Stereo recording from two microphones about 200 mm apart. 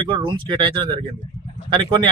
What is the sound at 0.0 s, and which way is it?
Speech, 25° right (ahead or behind).